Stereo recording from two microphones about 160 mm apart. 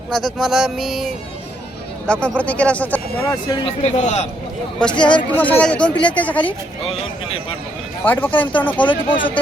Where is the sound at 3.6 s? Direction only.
45° left (ahead or behind).